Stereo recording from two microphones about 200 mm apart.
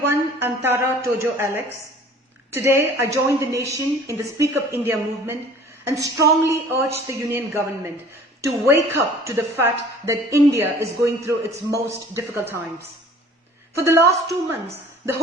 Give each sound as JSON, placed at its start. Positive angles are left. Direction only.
{"t": 0.1, "sound": "a woman's voice", "side_deg": -10}
{"t": 13.7, "sound": "a woman's voice", "side_deg": -15}